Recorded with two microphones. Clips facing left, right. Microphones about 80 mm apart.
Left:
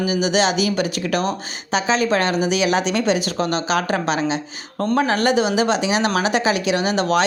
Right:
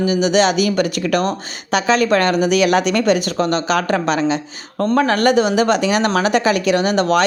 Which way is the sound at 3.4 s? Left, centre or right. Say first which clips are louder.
Right 3 dB; right.